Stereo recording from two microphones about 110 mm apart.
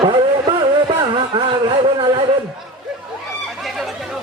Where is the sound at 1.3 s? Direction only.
50° right (ahead or behind).